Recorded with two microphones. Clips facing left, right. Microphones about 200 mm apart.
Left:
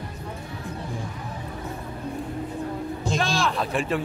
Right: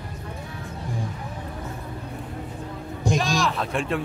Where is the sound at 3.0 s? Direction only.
15° right (ahead or behind).